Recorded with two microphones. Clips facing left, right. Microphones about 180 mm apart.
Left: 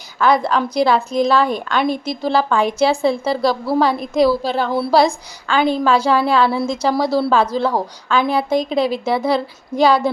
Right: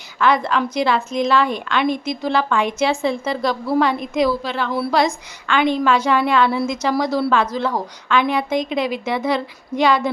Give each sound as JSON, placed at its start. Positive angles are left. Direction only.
{"t": 0.2, "sound": "a woman's voice", "side_deg": 35}